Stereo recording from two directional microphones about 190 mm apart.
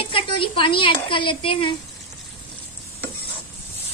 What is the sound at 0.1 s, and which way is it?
Speech, 25° left (ahead or behind).